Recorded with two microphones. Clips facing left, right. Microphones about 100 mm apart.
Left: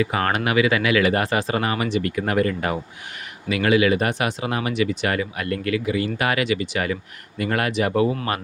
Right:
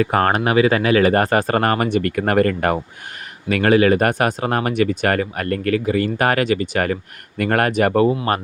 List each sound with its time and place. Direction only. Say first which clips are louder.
0.0 s speech: right 5 dB; 50° right (ahead or behind)
0.3 s speech: right 4 dB; 35° right (ahead or behind)